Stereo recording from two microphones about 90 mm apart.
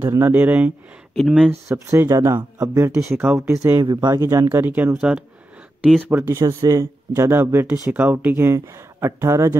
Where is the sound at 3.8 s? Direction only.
50° right (ahead or behind).